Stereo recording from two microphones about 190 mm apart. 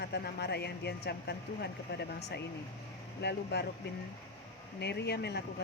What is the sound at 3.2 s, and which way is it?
Speech, 60° left (ahead or behind).